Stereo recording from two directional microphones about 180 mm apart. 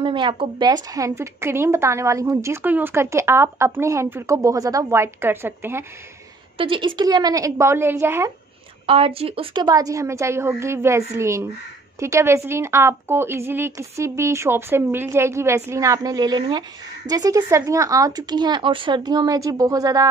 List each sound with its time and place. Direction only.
0.0 s a woman's voice: 25° right (ahead or behind)
6.6 s speech: 30° right (ahead or behind)
8.8 s a woman's voice: 30° right (ahead or behind)